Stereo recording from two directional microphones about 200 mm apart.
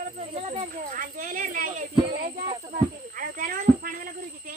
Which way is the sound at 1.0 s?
45° right (ahead or behind).